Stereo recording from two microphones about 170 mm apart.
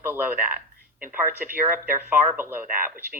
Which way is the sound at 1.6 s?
10° right (ahead or behind).